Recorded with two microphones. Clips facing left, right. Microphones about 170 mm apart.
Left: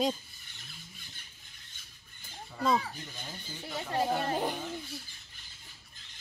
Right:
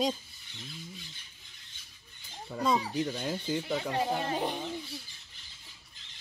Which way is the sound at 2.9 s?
80° right.